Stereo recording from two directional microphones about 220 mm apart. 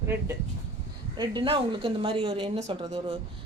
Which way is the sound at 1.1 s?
20° right (ahead or behind).